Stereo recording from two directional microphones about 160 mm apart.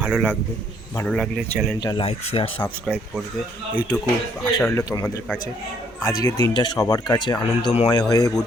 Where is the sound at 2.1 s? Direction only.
35° left (ahead or behind).